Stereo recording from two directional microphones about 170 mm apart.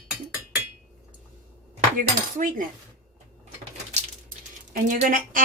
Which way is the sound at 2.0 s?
55° right (ahead or behind).